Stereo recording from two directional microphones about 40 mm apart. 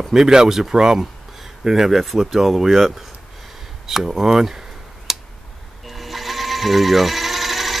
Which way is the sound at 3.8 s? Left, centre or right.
Centre.